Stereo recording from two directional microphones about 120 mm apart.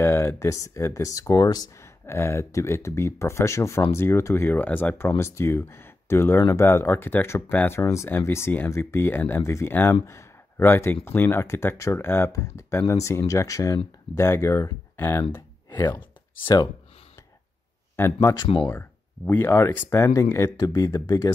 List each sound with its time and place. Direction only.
0.0 s speech: 20° left (ahead or behind)
15.7 s speech: 35° left (ahead or behind)
17.9 s speech: 20° left (ahead or behind)